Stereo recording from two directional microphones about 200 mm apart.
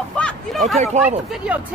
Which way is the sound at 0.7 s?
35° right (ahead or behind).